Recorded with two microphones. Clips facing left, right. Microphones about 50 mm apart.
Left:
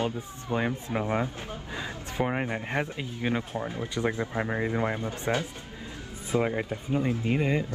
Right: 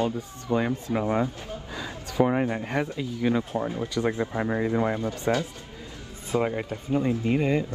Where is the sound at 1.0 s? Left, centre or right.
Left.